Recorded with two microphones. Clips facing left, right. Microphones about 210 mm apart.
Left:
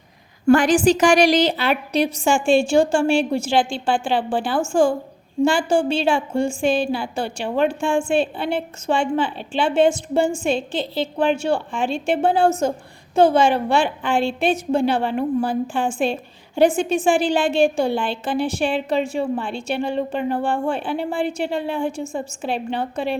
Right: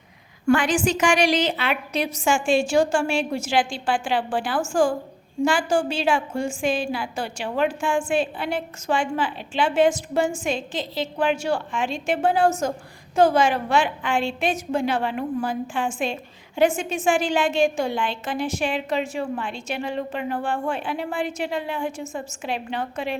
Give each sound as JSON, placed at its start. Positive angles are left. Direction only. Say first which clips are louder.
{"t": 0.4, "sound": "a woman's voice", "louder": "left 5 dB", "side_deg": 40}